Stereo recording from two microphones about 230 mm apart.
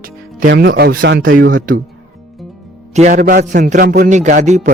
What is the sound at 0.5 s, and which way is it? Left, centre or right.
Speech, right.